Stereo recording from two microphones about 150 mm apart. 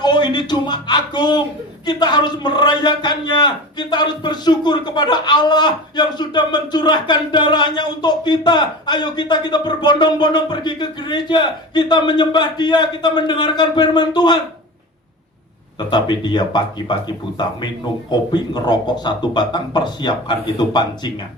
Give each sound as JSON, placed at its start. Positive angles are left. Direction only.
{"t": 0.0, "sound": "a man's voice", "side_deg": 30}
{"t": 15.9, "sound": "a man's voice", "side_deg": 30}